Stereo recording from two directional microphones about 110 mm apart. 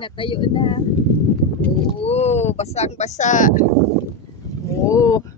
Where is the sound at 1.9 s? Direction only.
70° left (ahead or behind); by 3.2 s 90° left.